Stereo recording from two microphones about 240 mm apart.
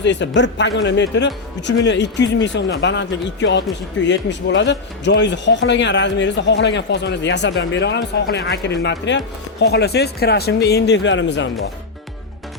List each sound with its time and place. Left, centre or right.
0.0 s speech: left